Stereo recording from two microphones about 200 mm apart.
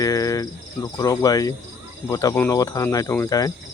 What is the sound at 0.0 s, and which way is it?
Speech, 15° left (ahead or behind).